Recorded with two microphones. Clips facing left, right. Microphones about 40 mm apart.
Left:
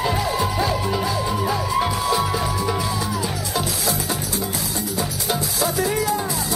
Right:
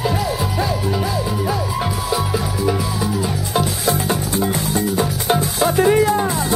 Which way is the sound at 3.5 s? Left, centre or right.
Right.